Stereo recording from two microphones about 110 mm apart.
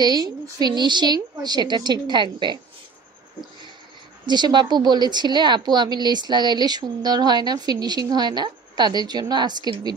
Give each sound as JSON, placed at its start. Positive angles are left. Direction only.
{"t": 0.0, "sound": "speech", "side_deg": -40}
{"t": 4.3, "sound": "speech", "side_deg": -40}